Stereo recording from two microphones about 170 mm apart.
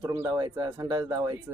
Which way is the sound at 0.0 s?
20° right (ahead or behind).